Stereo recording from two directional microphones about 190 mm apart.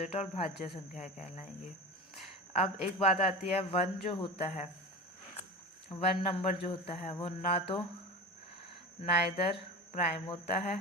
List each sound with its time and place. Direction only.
0.0 s a man's voice: 35° left (ahead or behind)
2.5 s a man's voice: 30° left (ahead or behind)
5.9 s speech: 30° left (ahead or behind)
9.0 s a man's voice: 30° left (ahead or behind)